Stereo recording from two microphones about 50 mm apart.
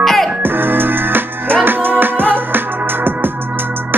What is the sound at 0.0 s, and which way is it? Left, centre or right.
Music, centre.